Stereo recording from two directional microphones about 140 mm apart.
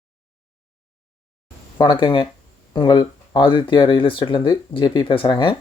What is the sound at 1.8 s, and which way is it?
Speech, 35° left (ahead or behind).